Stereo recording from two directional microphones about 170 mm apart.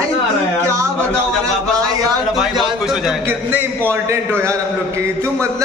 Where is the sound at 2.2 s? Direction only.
Centre (ahead or behind).